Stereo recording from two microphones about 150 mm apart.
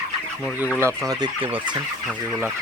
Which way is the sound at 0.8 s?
25° right (ahead or behind).